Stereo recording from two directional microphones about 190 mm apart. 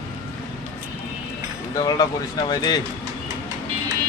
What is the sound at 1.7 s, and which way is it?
Speech, 20° left (ahead or behind).